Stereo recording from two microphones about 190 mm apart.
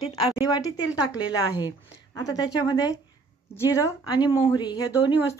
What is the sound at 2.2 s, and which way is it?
Speech, 20° left (ahead or behind).